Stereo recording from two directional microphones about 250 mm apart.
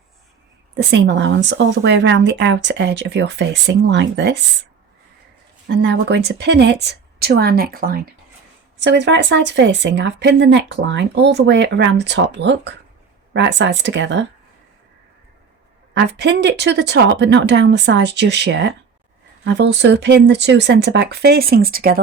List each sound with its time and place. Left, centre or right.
0.8 s speech: right
5.6 s speech: right
16.0 s speech: right